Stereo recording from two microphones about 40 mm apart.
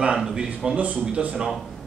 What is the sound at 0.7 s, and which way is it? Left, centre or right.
Speech, right.